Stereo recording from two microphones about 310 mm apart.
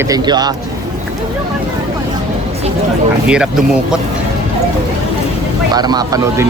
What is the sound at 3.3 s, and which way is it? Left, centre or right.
Speech, centre.